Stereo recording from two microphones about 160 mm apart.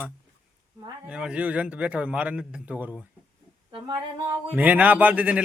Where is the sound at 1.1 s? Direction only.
5° right (ahead or behind).